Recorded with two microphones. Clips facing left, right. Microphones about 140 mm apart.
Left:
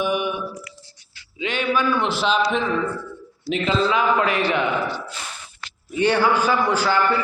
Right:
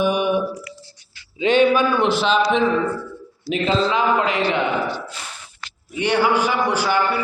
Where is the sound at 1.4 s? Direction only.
25° right (ahead or behind).